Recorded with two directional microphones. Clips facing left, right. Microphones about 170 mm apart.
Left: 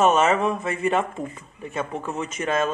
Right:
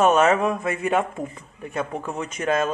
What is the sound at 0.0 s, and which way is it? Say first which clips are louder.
Speech: right 1 dB; centre (ahead or behind).